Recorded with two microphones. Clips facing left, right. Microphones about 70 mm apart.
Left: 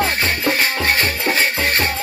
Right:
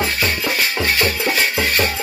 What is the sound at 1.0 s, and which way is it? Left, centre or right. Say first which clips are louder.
Music: even; left.